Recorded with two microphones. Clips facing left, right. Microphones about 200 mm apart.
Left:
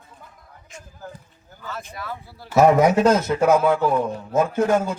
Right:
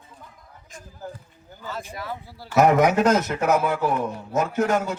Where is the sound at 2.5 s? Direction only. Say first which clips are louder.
Left 2 dB; 25° left (ahead or behind).